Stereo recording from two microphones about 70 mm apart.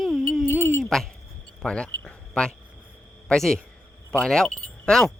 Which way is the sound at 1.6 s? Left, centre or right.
Centre.